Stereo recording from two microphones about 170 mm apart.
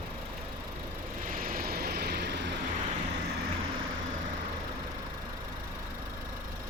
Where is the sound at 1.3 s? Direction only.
55° right (ahead or behind); by 2.5 s 80° right.